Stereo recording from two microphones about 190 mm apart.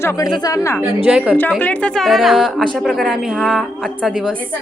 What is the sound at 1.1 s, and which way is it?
Speech, 5° right (ahead or behind).